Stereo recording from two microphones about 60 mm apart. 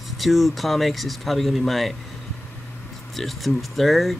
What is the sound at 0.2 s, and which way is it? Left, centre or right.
Speech, centre.